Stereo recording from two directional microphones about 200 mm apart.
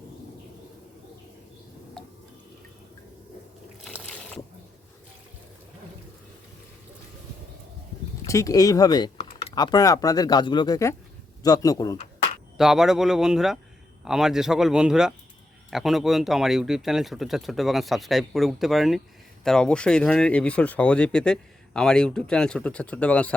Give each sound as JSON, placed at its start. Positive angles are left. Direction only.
{"t": 8.3, "sound": "speech", "side_deg": 15}
{"t": 12.5, "sound": "speech", "side_deg": 0}